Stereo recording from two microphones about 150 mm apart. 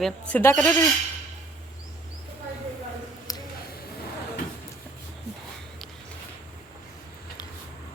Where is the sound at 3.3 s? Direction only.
25° left (ahead or behind).